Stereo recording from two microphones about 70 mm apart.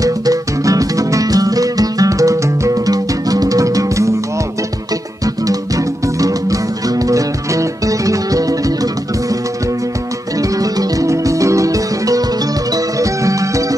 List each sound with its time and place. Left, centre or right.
0.0 s music: right
2.9 s music: right
5.2 s music: right
10.6 s music: right